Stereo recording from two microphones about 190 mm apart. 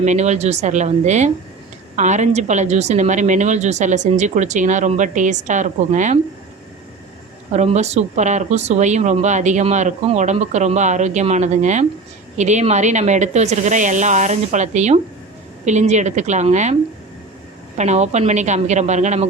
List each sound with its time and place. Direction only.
0.0 s speech: 40° right (ahead or behind)
7.5 s speech: 35° right (ahead or behind)
17.7 s speech: 35° right (ahead or behind)